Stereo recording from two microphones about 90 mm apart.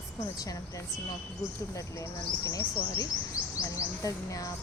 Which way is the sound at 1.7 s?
40° left (ahead or behind).